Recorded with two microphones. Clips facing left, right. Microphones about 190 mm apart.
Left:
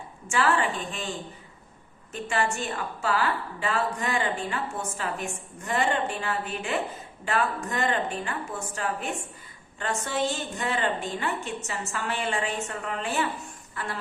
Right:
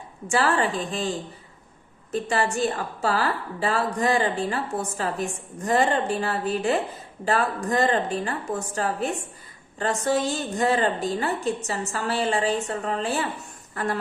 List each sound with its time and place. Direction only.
0.3 s a woman's voice: 35° right (ahead or behind)
2.1 s a woman's voice: 35° right (ahead or behind)